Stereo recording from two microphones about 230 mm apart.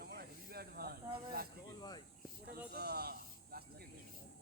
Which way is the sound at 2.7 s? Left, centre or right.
Right.